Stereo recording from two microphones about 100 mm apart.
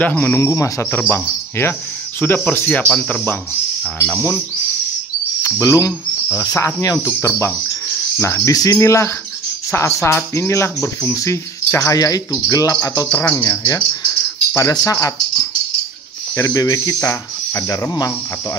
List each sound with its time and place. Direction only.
0.0 s speech: 20° left (ahead or behind)
5.4 s speech: 30° left (ahead or behind)
6.3 s cricket: 35° left (ahead or behind)
7.2 s speech: 25° left (ahead or behind)
8.5 s cricket: 35° left (ahead or behind)
8.7 s speech: 30° left (ahead or behind)
11.1 s cricket: 30° left (ahead or behind)
13.1 s cricket: 20° left (ahead or behind)
13.7 s cricket: 30° left (ahead or behind)
16.3 s cricket: 35° left (ahead or behind)
17.9 s cricket: 35° left (ahead or behind)